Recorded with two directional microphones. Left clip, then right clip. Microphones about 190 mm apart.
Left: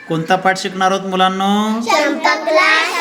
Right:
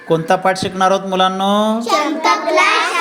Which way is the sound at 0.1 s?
30° right (ahead or behind).